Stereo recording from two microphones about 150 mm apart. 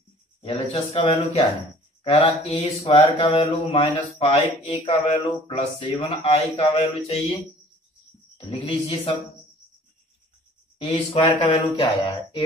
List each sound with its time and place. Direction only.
0.4 s speech: 40° left (ahead or behind)
8.4 s speech: 40° left (ahead or behind)
10.8 s speech: 35° left (ahead or behind)